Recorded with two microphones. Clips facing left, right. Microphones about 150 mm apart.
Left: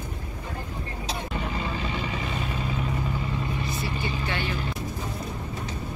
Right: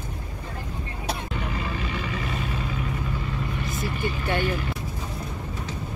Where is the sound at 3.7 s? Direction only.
45° right (ahead or behind).